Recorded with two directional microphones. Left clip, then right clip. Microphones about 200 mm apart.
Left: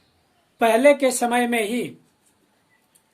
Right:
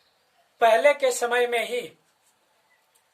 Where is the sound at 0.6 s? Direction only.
30° left (ahead or behind).